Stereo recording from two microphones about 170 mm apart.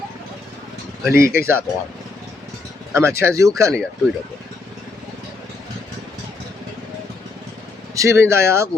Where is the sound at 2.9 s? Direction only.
15° right (ahead or behind).